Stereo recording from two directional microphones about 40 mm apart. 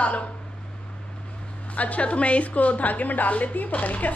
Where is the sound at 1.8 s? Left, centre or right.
Left.